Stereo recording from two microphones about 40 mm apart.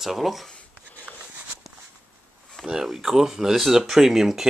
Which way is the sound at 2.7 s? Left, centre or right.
Centre.